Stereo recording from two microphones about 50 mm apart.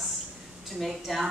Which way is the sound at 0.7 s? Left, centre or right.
Centre.